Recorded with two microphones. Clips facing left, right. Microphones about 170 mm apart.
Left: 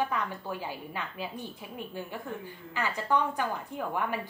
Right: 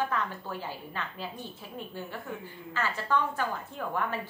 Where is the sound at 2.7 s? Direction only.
15° left (ahead or behind).